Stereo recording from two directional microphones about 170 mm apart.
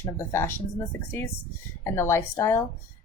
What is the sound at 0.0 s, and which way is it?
Speech, 15° left (ahead or behind).